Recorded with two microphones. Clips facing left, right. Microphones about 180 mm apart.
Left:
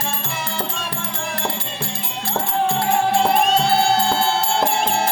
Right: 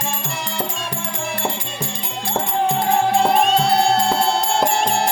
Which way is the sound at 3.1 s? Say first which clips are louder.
Right 1 dB; centre (ahead or behind).